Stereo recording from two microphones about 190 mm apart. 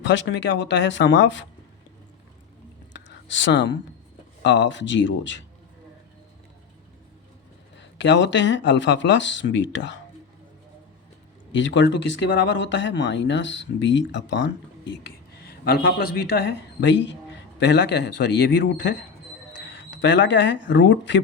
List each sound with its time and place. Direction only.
0.0 s speech: 70° left (ahead or behind)
2.9 s a sound: 70° left (ahead or behind)
4.4 s speech: 70° left (ahead or behind)
7.8 s speech: 70° left (ahead or behind)
11.5 s speech: 70° left (ahead or behind)
19.9 s speech: 70° left (ahead or behind)